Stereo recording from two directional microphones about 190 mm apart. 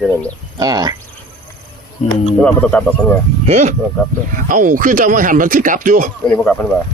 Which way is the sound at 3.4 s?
35° right (ahead or behind).